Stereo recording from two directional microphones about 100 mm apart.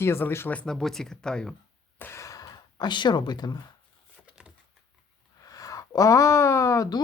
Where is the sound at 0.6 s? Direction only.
5° left (ahead or behind).